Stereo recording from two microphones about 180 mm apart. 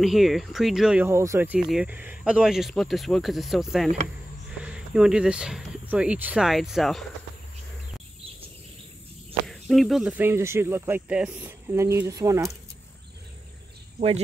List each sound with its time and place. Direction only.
0.0 s speech: centre (ahead or behind)
9.5 s speech: centre (ahead or behind); by 12.5 s 20° right (ahead or behind)
13.9 s speech: 35° right (ahead or behind)